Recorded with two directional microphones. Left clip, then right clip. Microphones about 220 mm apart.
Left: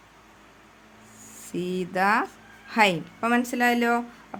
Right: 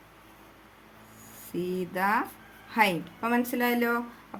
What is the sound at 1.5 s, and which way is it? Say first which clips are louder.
Speech: left 3 dB; 30° left (ahead or behind).